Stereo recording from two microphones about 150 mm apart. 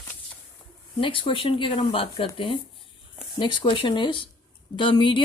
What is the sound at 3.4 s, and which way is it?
Speech, 30° left (ahead or behind).